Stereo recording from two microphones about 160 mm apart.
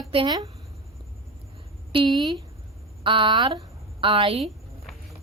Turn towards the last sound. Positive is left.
turn(degrees=0)  # may be behind; listen again after turning